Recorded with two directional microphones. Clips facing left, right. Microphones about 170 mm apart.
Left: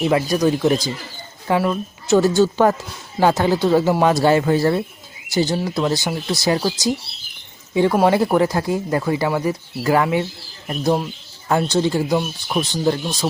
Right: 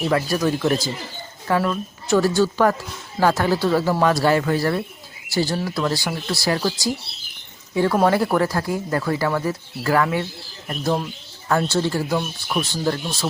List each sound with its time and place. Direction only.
0.0 s speech: 20° left (ahead or behind)